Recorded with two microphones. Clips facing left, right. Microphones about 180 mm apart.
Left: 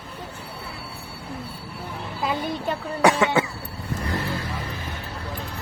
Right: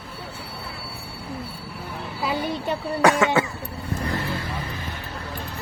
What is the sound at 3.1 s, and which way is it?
Cough, 25° left (ahead or behind).